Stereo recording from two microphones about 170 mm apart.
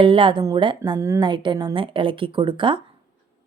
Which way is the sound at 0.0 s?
30° right (ahead or behind).